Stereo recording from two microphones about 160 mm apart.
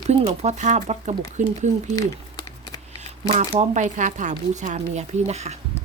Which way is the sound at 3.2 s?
45° right (ahead or behind).